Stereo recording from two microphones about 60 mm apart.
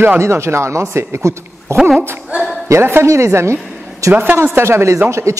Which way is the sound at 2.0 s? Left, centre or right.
Right.